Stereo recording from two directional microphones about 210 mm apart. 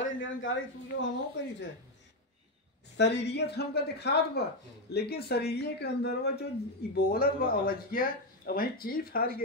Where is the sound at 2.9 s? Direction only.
55° left (ahead or behind).